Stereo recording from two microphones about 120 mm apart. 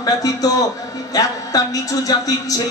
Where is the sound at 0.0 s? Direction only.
30° left (ahead or behind).